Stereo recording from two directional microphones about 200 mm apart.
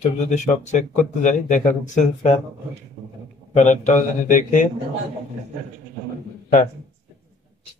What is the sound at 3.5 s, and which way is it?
Speech, 35° left (ahead or behind).